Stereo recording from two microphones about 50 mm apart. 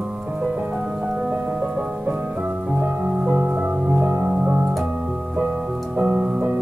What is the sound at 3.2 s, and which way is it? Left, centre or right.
Music, right.